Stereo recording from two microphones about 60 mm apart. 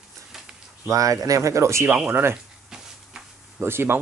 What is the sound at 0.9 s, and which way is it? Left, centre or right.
Speech, right.